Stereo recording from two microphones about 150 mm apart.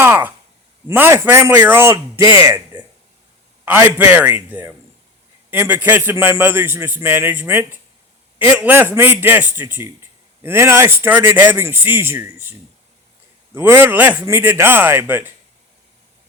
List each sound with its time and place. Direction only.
0.0 s a sound: 15° right (ahead or behind)
0.9 s a man's voice: 15° right (ahead or behind)
3.7 s a man's voice: 10° right (ahead or behind)